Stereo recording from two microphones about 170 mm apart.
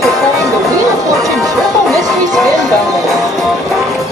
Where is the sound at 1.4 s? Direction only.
20° right (ahead or behind).